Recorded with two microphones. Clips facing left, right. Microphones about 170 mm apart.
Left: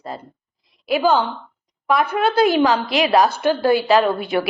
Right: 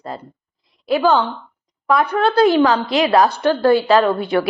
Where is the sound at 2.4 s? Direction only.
10° left (ahead or behind).